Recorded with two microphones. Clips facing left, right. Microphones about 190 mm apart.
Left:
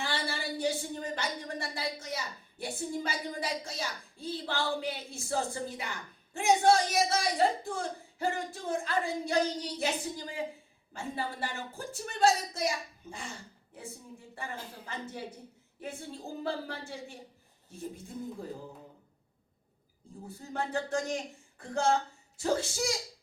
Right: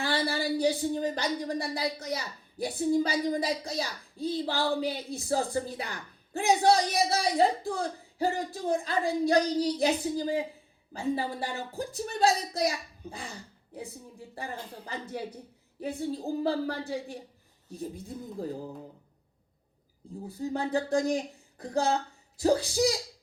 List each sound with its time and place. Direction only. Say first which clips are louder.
0.0 s speech: right 6 dB; 35° right (ahead or behind)
14.3 s speech: right 3 dB; 35° right (ahead or behind)
20.2 s speech: right 5 dB; 35° right (ahead or behind)
22.4 s speech: right 6 dB; 35° right (ahead or behind)